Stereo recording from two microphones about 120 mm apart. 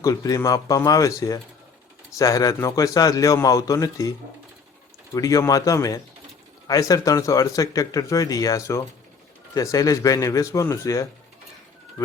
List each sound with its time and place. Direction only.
0.0 s speech: 30° left (ahead or behind)
5.1 s speech: 30° left (ahead or behind)